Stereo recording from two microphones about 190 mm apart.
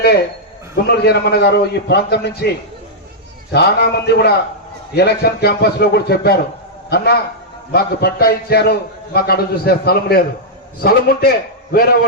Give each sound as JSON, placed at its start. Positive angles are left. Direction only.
{"t": 0.9, "sound": "a man's voice", "side_deg": 60}
{"t": 3.5, "sound": "a man's voice", "side_deg": 55}